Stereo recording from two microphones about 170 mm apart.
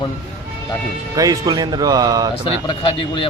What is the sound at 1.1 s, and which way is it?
Speech, 20° right (ahead or behind).